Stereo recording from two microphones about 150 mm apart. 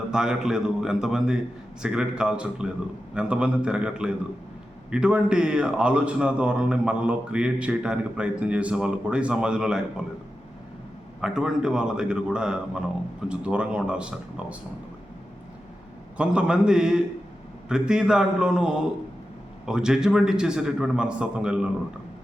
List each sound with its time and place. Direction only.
0.1 s a man's voice: 5° right (ahead or behind)
11.2 s a man's voice: 5° right (ahead or behind)
16.1 s a man's voice: 5° right (ahead or behind)